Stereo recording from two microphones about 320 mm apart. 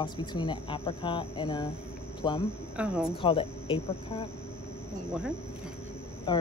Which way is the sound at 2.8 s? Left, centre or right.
Centre.